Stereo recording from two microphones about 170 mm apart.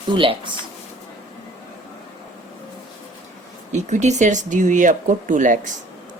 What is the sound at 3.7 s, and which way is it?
Speech, 45° right (ahead or behind).